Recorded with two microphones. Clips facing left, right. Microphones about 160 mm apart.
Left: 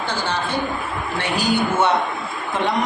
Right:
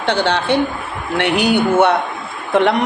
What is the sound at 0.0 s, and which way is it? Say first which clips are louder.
A man's voice: right 7 dB; 70° right (ahead or behind).